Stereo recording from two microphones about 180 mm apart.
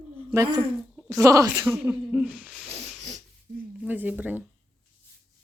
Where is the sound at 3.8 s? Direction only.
10° right (ahead or behind).